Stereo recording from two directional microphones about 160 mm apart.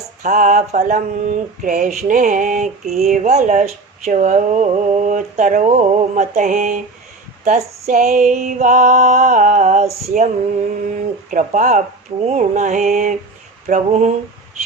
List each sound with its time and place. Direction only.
0.2 s speech: 50° right (ahead or behind)
2.8 s a sound: centre (ahead or behind)
3.1 s speech: 50° right (ahead or behind)